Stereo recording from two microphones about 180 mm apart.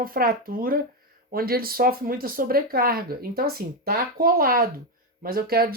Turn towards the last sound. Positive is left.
turn(degrees=-55)  # may be behind; listen again after turning